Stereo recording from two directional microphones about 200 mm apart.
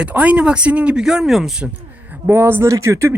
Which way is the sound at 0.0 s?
5° right (ahead or behind).